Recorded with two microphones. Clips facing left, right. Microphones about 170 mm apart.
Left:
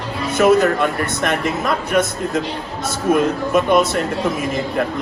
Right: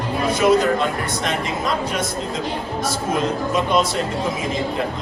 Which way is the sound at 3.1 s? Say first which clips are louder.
Left 7 dB; 55° left (ahead or behind).